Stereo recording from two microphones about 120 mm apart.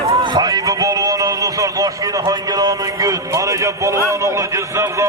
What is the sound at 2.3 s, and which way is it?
A man's voice, 30° right (ahead or behind).